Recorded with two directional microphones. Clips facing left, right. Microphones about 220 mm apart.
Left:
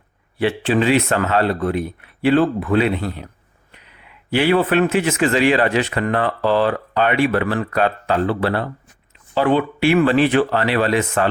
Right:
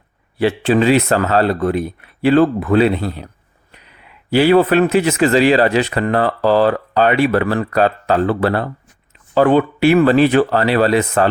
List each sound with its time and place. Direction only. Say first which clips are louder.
0.3 s speech: right 3 dB; 40° right (ahead or behind)
4.3 s speech: right 5 dB; 35° right (ahead or behind)